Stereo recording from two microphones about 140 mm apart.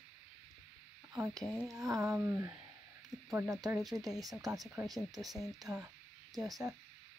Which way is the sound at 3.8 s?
Centre (ahead or behind).